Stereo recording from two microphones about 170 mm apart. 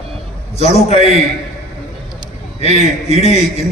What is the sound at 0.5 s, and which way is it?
Speech, 40° left (ahead or behind).